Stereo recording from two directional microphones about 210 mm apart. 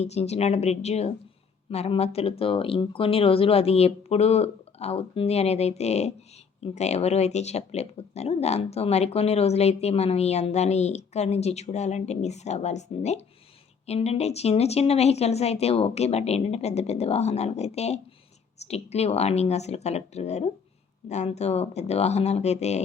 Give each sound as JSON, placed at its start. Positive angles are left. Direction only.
{"t": 0.0, "sound": "speech", "side_deg": 30}